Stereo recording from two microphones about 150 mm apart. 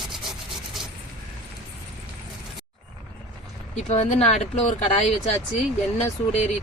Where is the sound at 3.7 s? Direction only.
50° left (ahead or behind).